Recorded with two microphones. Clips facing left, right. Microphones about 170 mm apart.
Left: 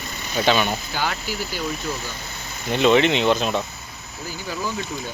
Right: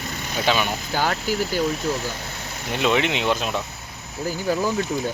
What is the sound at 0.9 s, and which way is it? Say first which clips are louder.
Speech: right 4 dB; 40° right (ahead or behind).